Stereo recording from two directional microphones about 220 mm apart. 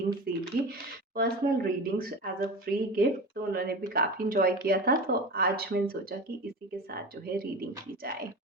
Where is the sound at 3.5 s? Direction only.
45° right (ahead or behind).